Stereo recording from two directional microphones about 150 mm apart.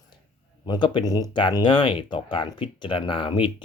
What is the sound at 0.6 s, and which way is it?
Speech, 30° left (ahead or behind).